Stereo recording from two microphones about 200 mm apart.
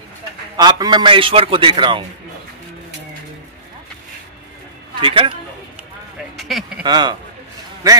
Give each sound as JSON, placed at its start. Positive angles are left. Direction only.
{"t": 0.6, "sound": "a man's voice", "side_deg": -20}
{"t": 5.0, "sound": "a man's voice", "side_deg": -25}
{"t": 6.3, "sound": "a sound", "side_deg": 0}
{"t": 6.8, "sound": "a man's voice", "side_deg": -20}